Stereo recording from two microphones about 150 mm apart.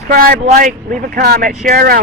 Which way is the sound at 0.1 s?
70° right (ahead or behind).